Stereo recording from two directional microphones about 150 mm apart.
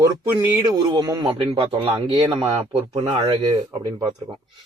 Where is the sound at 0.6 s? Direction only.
25° right (ahead or behind).